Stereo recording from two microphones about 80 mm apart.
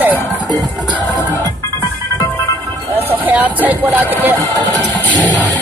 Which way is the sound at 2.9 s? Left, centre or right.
Right.